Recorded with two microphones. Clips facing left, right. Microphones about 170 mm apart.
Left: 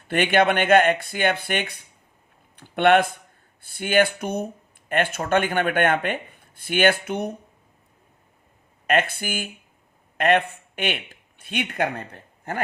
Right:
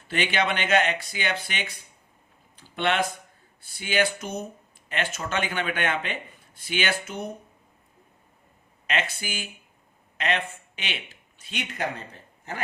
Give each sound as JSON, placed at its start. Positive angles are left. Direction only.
{"t": 0.1, "sound": "speech", "side_deg": 55}
{"t": 8.9, "sound": "speech", "side_deg": 55}